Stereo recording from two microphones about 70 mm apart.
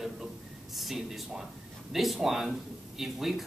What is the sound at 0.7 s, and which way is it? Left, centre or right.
Speech, centre.